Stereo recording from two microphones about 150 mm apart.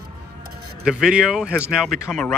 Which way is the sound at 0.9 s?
5° right (ahead or behind).